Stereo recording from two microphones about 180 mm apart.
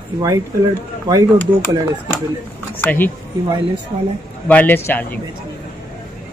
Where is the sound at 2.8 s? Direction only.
10° left (ahead or behind).